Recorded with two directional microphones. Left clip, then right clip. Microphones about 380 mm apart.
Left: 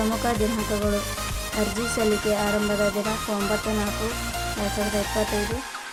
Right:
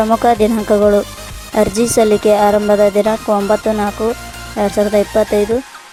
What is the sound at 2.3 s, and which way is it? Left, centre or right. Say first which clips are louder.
Speech: right 13 dB; right.